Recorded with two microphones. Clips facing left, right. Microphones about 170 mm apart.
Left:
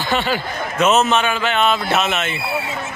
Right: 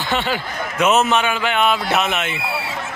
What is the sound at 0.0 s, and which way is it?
A man's voice, 20° right (ahead or behind).